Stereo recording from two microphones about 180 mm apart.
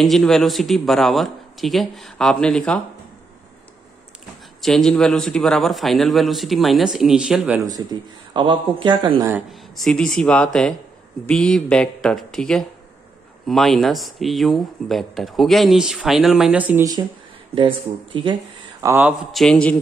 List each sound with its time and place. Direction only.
0.0 s speech: centre (ahead or behind)
4.6 s speech: centre (ahead or behind)
8.3 s speech: 25° right (ahead or behind)
9.5 s speech: centre (ahead or behind)
17.6 s speech: 25° right (ahead or behind)
18.8 s a man's voice: 15° right (ahead or behind)
19.3 s speech: 5° left (ahead or behind)